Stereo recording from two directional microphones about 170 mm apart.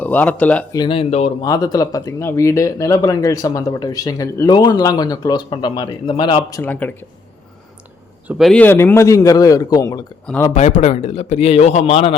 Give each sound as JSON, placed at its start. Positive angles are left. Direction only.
{"t": 0.0, "sound": "speech", "side_deg": 10}
{"t": 0.7, "sound": "a man's voice", "side_deg": 30}
{"t": 1.5, "sound": "speech", "side_deg": 20}
{"t": 6.6, "sound": "speech", "side_deg": 10}
{"t": 8.3, "sound": "speech", "side_deg": 0}
{"t": 8.6, "sound": "speech", "side_deg": 10}
{"t": 10.5, "sound": "a man's voice", "side_deg": 45}